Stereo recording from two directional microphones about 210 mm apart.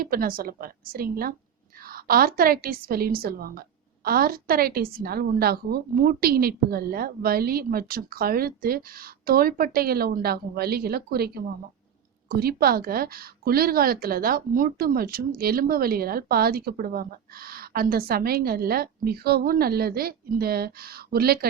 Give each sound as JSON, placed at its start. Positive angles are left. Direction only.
{"t": 0.0, "sound": "a woman's voice", "side_deg": -45}